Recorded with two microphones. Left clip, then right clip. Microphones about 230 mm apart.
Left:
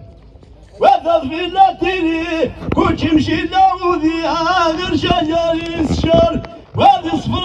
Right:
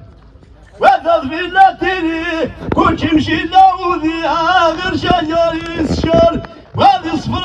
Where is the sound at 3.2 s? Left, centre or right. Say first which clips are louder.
Right 1 dB; centre.